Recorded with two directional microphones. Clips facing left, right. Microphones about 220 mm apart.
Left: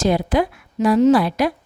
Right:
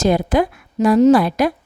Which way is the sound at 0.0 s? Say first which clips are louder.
Right 2 dB; 45° right (ahead or behind).